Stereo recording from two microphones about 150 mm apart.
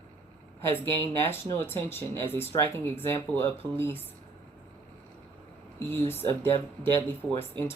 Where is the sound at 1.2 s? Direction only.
15° left (ahead or behind).